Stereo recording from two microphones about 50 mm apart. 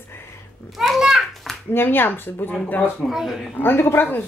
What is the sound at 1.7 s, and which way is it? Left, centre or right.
Speech, left.